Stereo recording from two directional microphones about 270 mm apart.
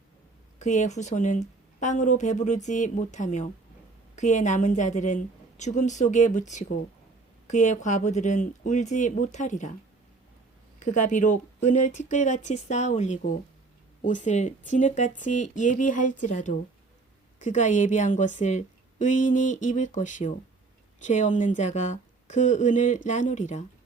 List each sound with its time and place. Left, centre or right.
0.6 s a woman's voice: left
10.8 s a woman's voice: left